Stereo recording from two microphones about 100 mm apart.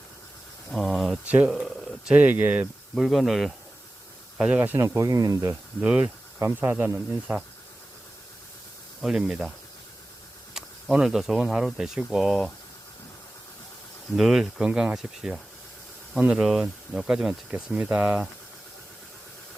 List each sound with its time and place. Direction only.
0.7 s a sound: 5° left (ahead or behind)
1.2 s speech: 15° right (ahead or behind)
1.6 s a sound: centre (ahead or behind)
2.1 s speech: 20° right (ahead or behind)
2.9 s speech: centre (ahead or behind)
4.4 s speech: 10° right (ahead or behind)
4.9 s speech: 40° right (ahead or behind)
5.8 s speech: 10° right (ahead or behind)
9.0 s speech: 5° right (ahead or behind)
10.9 s speech: 5° right (ahead or behind)
14.2 s speech: 5° right (ahead or behind)